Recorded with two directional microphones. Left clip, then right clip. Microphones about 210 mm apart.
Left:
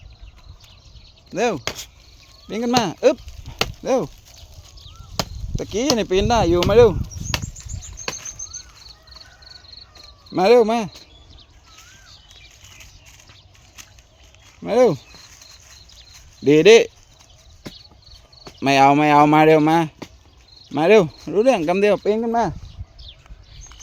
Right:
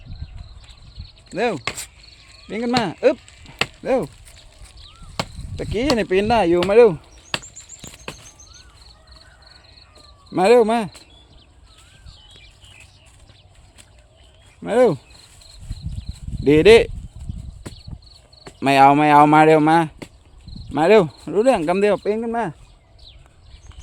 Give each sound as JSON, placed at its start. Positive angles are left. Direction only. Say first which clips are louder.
{"t": 1.3, "sound": "speech", "louder": "left 1 dB", "side_deg": 5}
{"t": 5.2, "sound": "chop", "louder": "left 1 dB", "side_deg": 40}
{"t": 5.5, "sound": "speech", "louder": "even", "side_deg": 0}
{"t": 10.3, "sound": "speech", "louder": "even", "side_deg": 0}
{"t": 14.6, "sound": "speech", "louder": "even", "side_deg": 0}
{"t": 16.4, "sound": "speech", "louder": "even", "side_deg": 0}
{"t": 18.6, "sound": "speech", "louder": "right 1 dB", "side_deg": 0}
{"t": 22.0, "sound": "speech", "louder": "left 3 dB", "side_deg": 15}